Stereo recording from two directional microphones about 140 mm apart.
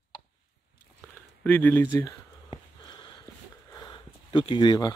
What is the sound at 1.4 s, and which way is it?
Speech, 10° left (ahead or behind).